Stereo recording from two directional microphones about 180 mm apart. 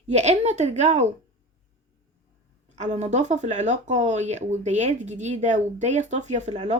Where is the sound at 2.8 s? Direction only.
40° right (ahead or behind).